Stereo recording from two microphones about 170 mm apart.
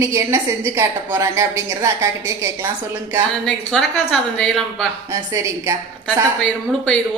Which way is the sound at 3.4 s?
5° left (ahead or behind).